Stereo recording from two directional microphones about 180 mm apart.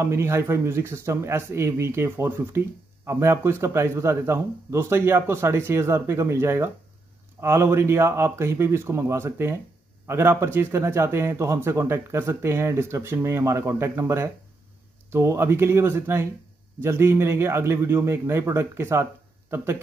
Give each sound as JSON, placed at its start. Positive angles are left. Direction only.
{"t": 0.0, "sound": "speech", "side_deg": -15}